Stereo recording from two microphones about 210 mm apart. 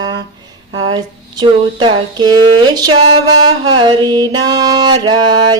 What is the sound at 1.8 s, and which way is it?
Music, 20° right (ahead or behind).